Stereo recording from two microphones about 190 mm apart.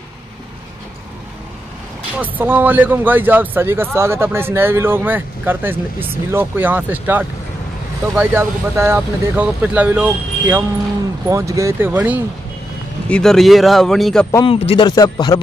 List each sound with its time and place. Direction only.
2.1 s speech: 10° right (ahead or behind)
13.1 s speech: centre (ahead or behind)
14.4 s speech: 30° left (ahead or behind)